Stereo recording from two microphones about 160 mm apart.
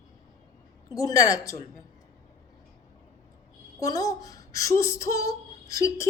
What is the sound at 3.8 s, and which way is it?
A woman's voice, 20° left (ahead or behind).